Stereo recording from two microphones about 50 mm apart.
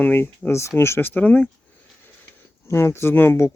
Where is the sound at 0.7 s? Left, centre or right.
Left.